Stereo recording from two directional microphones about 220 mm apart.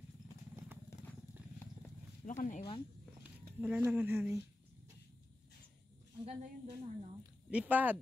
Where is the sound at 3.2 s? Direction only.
5° right (ahead or behind).